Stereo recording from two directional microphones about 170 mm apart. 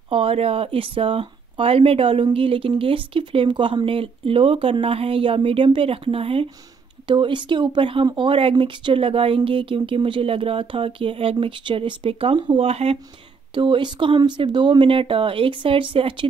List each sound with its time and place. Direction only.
0.1 s speech: 35° right (ahead or behind)